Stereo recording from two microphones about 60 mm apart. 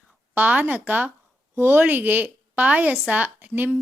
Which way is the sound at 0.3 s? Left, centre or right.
Right.